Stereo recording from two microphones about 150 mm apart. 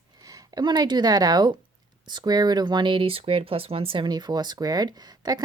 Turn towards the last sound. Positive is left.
turn(degrees=-25)  # may be behind; listen again after turning